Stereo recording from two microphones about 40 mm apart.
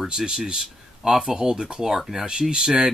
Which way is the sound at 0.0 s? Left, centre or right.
Centre.